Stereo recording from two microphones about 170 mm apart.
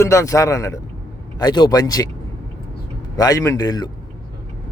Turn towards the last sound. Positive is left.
turn(degrees=20)  # may be behind; listen again after turning